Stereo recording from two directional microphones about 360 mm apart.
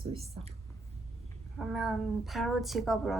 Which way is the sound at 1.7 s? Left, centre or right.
Centre.